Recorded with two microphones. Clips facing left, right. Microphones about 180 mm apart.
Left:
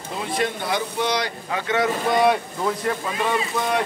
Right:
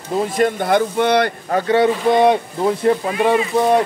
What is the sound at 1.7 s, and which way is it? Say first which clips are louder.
Speech: right 6 dB; 25° right (ahead or behind).